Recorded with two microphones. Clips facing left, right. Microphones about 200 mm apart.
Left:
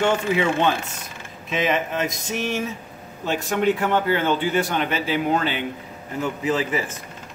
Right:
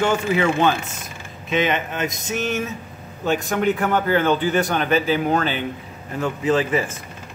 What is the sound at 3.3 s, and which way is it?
A man's voice, 25° left (ahead or behind).